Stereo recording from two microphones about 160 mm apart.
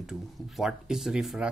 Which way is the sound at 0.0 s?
5° right (ahead or behind).